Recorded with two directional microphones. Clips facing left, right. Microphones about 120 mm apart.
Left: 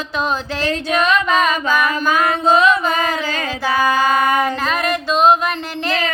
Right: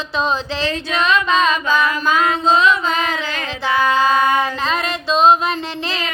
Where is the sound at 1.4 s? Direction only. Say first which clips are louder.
Even; 25° right (ahead or behind).